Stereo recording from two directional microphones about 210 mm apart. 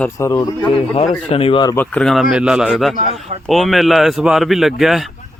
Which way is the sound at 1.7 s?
5° left (ahead or behind).